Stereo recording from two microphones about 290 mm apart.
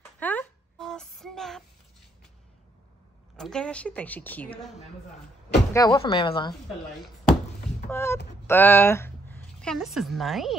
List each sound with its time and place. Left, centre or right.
0.2 s a sound: centre
3.3 s a woman's voice: centre
5.7 s speech: centre
7.9 s a woman's voice: centre